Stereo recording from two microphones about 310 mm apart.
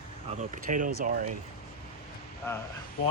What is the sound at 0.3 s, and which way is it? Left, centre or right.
Speech, right.